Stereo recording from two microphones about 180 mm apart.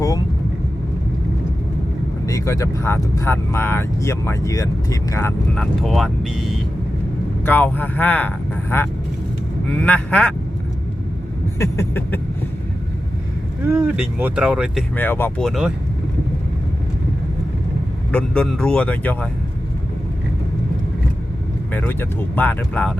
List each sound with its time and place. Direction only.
2.2 s speech: 15° left (ahead or behind)
5.5 s speech: centre (ahead or behind)
7.4 s speech: 10° left (ahead or behind)
11.6 s speech: 15° left (ahead or behind)
13.7 s speech: 10° right (ahead or behind)
14.9 s speech: 10° left (ahead or behind)
15.4 s speech: centre (ahead or behind)
18.1 s speech: 5° left (ahead or behind)
21.7 s speech: 10° left (ahead or behind)